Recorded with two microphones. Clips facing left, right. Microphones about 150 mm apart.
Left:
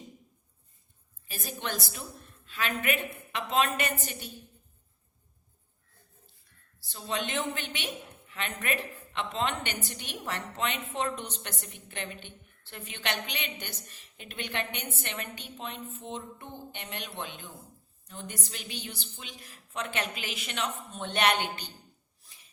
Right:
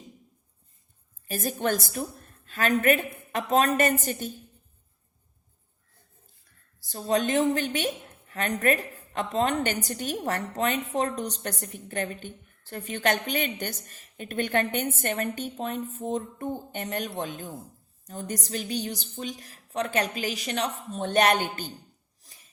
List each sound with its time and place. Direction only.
1.3 s a woman's voice: 45° right (ahead or behind)
6.7 s a woman's voice: 45° right (ahead or behind)